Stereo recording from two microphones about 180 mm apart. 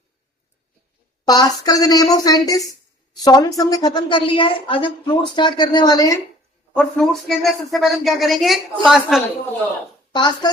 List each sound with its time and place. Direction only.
1.2 s a woman's voice: 20° left (ahead or behind)
6.7 s speech: centre (ahead or behind)
10.2 s a woman's voice: 25° left (ahead or behind)